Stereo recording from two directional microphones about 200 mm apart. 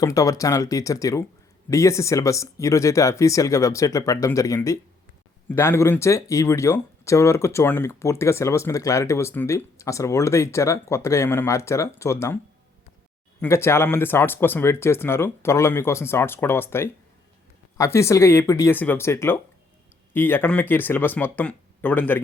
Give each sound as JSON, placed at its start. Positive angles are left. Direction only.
{"t": 0.0, "sound": "speech", "side_deg": 15}
{"t": 13.4, "sound": "speech", "side_deg": 15}